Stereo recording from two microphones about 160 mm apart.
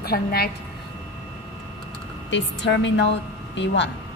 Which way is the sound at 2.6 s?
90° left.